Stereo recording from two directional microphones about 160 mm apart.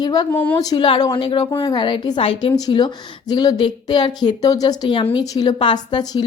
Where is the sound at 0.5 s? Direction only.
25° left (ahead or behind).